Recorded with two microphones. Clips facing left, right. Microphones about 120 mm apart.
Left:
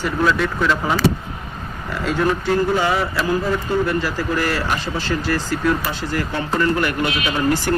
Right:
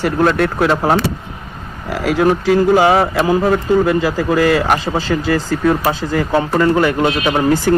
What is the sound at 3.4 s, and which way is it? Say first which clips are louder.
Speech: right 7 dB; 55° right (ahead or behind).